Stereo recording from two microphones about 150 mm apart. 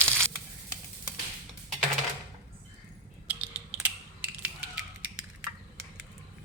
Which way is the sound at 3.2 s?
10° right (ahead or behind).